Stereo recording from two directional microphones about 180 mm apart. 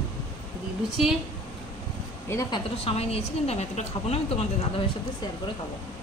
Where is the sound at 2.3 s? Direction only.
20° left (ahead or behind).